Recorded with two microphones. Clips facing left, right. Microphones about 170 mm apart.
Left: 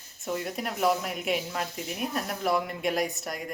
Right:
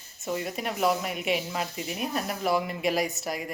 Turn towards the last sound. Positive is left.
turn(degrees=-5)  # may be behind; listen again after turning